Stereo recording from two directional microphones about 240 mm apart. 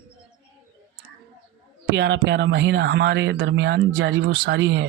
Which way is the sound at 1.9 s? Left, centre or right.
Right.